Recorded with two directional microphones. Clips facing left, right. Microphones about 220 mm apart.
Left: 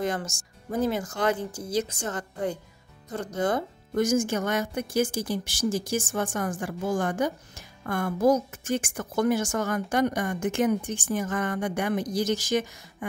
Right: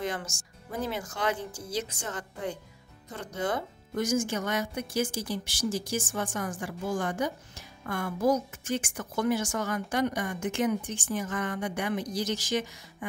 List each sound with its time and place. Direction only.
0.0 s a woman's voice: 45° left (ahead or behind)